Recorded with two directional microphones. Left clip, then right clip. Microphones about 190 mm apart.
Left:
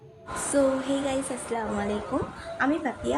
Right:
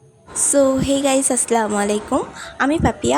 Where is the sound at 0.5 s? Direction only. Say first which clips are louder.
Right 8 dB; 45° right (ahead or behind).